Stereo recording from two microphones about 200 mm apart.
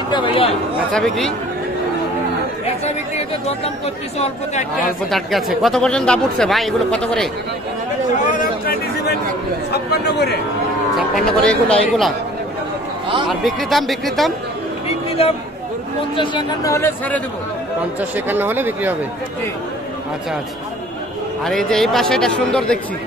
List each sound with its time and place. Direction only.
0.1 s chatter: 25° left (ahead or behind)
0.9 s speech: centre (ahead or behind)
2.6 s speech: 30° left (ahead or behind)
5.1 s speech: centre (ahead or behind)
8.3 s a sound: 45° left (ahead or behind)
9.7 s speech: 55° left (ahead or behind)
11.0 s speech: centre (ahead or behind)
13.3 s speech: centre (ahead or behind)
15.0 s a sound: 30° left (ahead or behind)
16.2 s speech: 20° left (ahead or behind)
18.1 s speech: 10° right (ahead or behind)
21.5 s speech: centre (ahead or behind)